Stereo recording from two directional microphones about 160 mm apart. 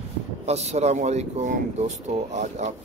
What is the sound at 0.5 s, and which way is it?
Speech, 45° right (ahead or behind).